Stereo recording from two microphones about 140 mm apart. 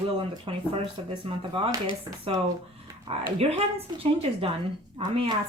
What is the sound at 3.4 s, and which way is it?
A woman's voice, 45° right (ahead or behind).